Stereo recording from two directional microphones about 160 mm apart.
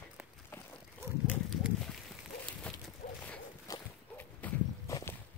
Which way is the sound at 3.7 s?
20° left (ahead or behind).